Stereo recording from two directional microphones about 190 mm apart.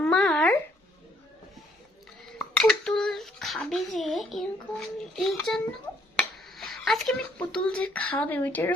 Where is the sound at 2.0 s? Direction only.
5° left (ahead or behind).